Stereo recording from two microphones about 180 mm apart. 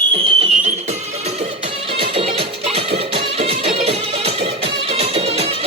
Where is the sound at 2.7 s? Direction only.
35° right (ahead or behind).